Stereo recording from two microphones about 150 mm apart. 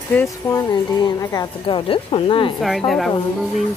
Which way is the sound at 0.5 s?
25° left (ahead or behind).